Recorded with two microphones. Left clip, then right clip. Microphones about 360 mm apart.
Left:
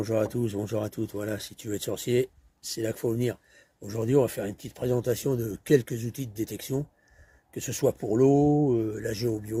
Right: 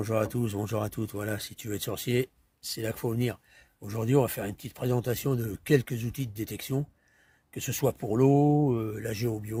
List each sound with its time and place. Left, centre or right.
0.0 s speech: right